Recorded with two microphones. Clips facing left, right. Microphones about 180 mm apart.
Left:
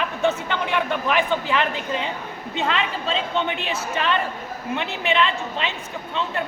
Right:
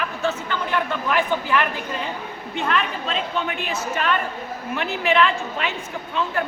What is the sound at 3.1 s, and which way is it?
Speech, 30° left (ahead or behind).